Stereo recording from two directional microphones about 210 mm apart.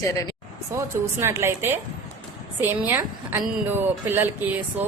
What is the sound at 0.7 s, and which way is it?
A woman's voice, 15° right (ahead or behind).